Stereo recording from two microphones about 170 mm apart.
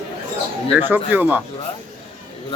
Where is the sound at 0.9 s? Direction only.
10° right (ahead or behind).